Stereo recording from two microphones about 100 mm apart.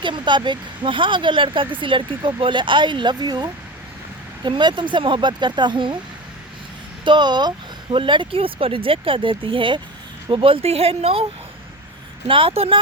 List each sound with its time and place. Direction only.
0.0 s speech: 50° right (ahead or behind)
7.0 s speech: 50° right (ahead or behind); by 11.3 s 80° right
12.3 s speech: 65° right (ahead or behind)